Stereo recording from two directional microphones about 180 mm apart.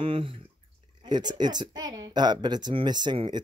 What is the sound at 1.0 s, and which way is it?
Speech, 25° right (ahead or behind).